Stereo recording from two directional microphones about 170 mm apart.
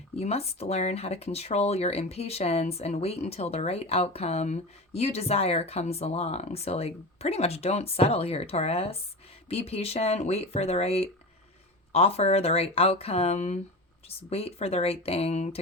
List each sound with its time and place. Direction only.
0.2 s speech: 40° left (ahead or behind)